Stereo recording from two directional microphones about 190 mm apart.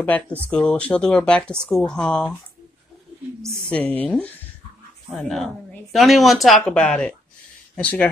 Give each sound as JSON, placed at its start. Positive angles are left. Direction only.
{"t": 0.0, "sound": "speech", "side_deg": 10}
{"t": 3.7, "sound": "a woman's voice", "side_deg": 10}